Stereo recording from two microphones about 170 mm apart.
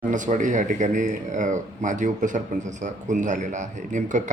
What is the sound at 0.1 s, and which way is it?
Speech, 50° right (ahead or behind).